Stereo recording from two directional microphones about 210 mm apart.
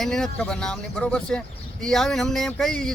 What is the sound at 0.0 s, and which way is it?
Speech, 5° left (ahead or behind).